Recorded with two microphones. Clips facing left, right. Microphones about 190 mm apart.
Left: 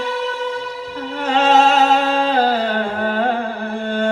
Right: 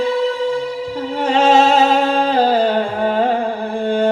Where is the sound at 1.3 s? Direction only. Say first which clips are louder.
Right 1 dB; 15° right (ahead or behind).